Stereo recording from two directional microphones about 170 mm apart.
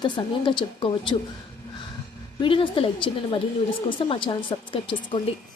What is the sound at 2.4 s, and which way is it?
A child's voice, 30° left (ahead or behind).